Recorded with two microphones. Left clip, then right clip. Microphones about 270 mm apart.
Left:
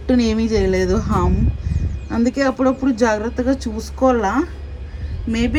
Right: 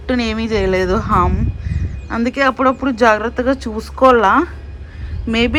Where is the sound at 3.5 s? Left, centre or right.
Centre.